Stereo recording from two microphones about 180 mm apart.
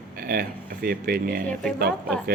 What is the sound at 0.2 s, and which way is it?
Speech, 55° right (ahead or behind).